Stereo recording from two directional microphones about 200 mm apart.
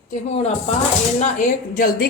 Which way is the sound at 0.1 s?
35° left (ahead or behind).